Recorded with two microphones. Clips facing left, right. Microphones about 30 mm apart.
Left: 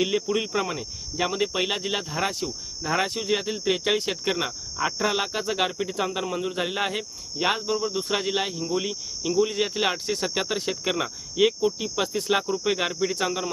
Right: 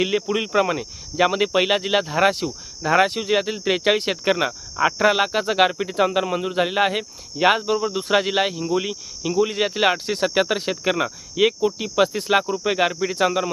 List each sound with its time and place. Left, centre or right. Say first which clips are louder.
0.0 s speech: right 3 dB; right
1.1 s speech: right 7 dB; right
2.9 s speech: right 7 dB; right
4.8 s speech: right 7 dB; right
7.3 s speech: right 7 dB; right
7.7 s speech: right 6 dB; right
11.8 s speech: right 7 dB; right